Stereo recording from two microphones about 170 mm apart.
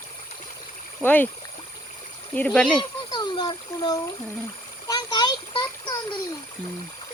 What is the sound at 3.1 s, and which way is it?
Speech, 25° left (ahead or behind).